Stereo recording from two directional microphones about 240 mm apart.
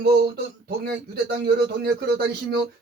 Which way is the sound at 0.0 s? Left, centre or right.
Right.